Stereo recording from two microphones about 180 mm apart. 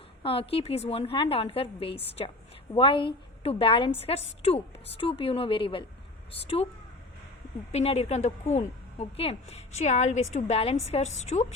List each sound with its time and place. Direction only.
0.2 s a woman's voice: 30° left (ahead or behind)
7.7 s a woman's voice: 35° left (ahead or behind)